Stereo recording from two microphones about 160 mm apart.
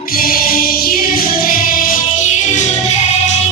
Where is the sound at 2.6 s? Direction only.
45° left (ahead or behind).